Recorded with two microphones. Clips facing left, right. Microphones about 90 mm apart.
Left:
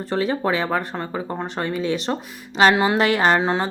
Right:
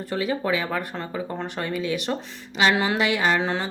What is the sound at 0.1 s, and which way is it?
Speech, 35° left (ahead or behind).